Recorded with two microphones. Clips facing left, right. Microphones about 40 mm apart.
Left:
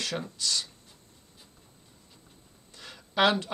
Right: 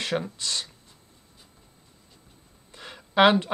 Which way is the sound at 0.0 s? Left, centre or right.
Right.